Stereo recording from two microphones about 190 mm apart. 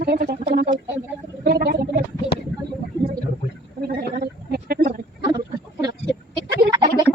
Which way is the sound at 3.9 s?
55° right (ahead or behind).